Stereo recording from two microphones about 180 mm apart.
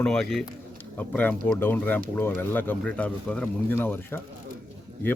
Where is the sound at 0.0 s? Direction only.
5° left (ahead or behind).